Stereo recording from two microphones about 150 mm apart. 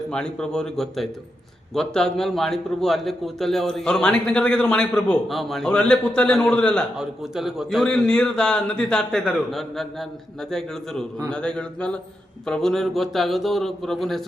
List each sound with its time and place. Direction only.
0.1 s a man's voice: 5° left (ahead or behind)